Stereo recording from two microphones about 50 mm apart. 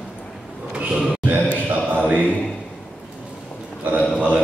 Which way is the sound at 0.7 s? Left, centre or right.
Right.